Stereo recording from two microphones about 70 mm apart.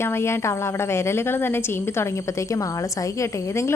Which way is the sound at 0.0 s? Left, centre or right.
Left.